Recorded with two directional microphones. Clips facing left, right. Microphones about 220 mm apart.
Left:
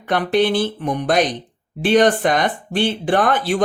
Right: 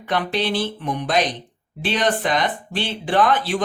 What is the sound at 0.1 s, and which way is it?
Speech, 50° left (ahead or behind).